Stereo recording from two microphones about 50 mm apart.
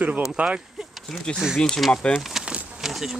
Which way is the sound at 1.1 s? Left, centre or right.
Centre.